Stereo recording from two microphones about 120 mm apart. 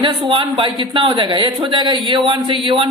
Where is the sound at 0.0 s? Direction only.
45° right (ahead or behind).